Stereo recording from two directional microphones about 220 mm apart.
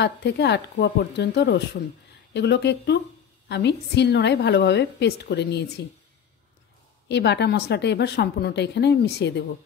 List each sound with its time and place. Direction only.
0.0 s a woman's voice: 50° left (ahead or behind)
7.1 s a woman's voice: 50° left (ahead or behind)